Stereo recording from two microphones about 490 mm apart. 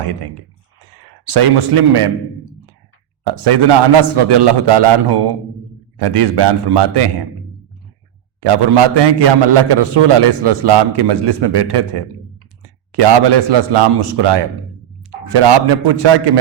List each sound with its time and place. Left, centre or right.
0.0 s a man's voice: right
8.4 s a man's voice: right